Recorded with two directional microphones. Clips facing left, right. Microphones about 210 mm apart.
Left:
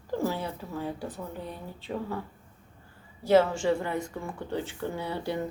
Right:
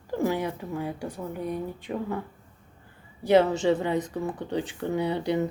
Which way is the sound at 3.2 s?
15° right (ahead or behind).